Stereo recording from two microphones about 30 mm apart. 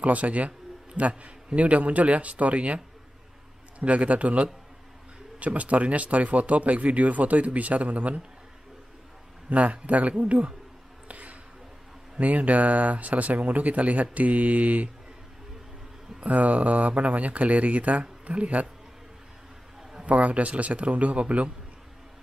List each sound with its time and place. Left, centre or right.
0.0 s speech: right
3.8 s speech: right
9.5 s speech: right
11.1 s a sound: right
12.2 s speech: right
16.3 s speech: right
20.0 s speech: right